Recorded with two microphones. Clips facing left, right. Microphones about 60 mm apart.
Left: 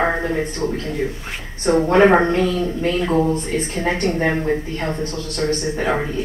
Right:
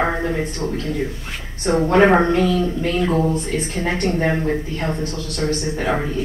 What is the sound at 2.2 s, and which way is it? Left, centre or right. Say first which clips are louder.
A woman's voice: right 1 dB; left.